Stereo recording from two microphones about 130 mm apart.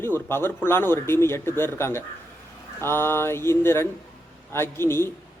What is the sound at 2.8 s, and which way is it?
Mantra, 20° left (ahead or behind).